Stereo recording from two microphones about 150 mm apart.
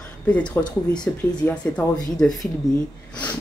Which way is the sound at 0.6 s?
15° left (ahead or behind).